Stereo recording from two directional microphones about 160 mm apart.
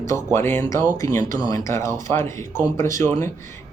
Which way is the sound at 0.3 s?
15° left (ahead or behind).